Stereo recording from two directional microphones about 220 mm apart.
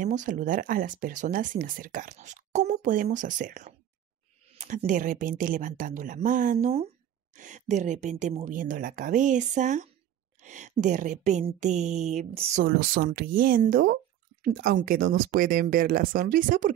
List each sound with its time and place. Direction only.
0.0 s speech: 35° right (ahead or behind)